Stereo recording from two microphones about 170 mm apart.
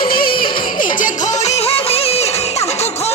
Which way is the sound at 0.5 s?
55° left (ahead or behind).